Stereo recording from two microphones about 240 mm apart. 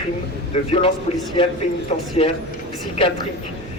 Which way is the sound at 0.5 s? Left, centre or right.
Left.